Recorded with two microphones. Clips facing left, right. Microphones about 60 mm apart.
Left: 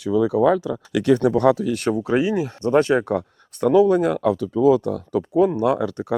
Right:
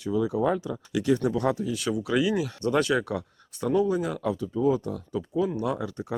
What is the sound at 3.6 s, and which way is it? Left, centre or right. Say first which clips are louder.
Speech: left 9 dB; left.